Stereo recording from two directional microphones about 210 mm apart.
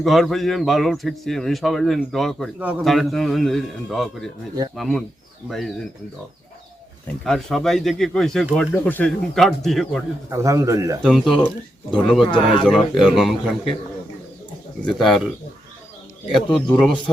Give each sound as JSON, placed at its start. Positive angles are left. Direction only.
{"t": 0.0, "sound": "a man's voice", "side_deg": 0}
{"t": 7.3, "sound": "a man's voice", "side_deg": 0}
{"t": 10.2, "sound": "a man's voice", "side_deg": -15}
{"t": 11.0, "sound": "a man's voice", "side_deg": 5}
{"t": 12.2, "sound": "speech", "side_deg": 25}
{"t": 12.7, "sound": "a man's voice", "side_deg": 0}
{"t": 14.9, "sound": "a man's voice", "side_deg": 0}
{"t": 16.3, "sound": "a man's voice", "side_deg": 5}